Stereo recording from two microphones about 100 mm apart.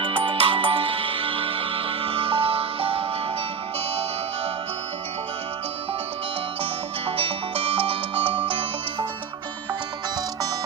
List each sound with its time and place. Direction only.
0.0 s music: 55° right (ahead or behind)
7.2 s music: 70° right (ahead or behind)